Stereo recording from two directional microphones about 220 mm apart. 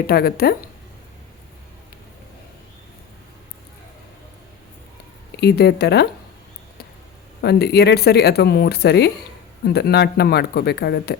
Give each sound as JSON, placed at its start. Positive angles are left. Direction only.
{"t": 0.1, "sound": "speech", "side_deg": 45}
{"t": 5.4, "sound": "speech", "side_deg": 50}
{"t": 7.4, "sound": "speech", "side_deg": 50}